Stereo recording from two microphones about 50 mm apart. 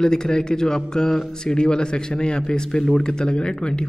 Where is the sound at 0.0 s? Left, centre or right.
Centre.